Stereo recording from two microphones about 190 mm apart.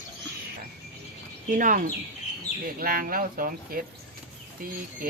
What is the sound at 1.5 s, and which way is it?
A woman's voice, 45° right (ahead or behind).